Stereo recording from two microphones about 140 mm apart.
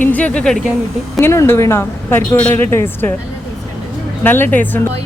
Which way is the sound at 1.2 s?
20° left (ahead or behind).